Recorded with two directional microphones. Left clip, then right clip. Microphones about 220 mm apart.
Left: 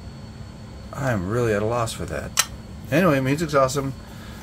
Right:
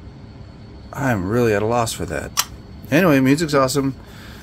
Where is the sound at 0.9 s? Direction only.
40° right (ahead or behind).